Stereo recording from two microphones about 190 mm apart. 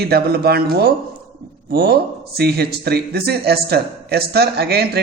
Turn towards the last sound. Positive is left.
turn(degrees=-55)  # may be behind; listen again after turning